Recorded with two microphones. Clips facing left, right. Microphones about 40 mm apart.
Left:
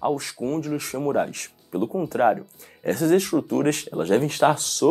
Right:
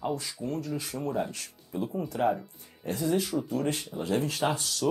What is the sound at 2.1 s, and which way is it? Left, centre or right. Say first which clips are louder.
Speech: left 8 dB; left.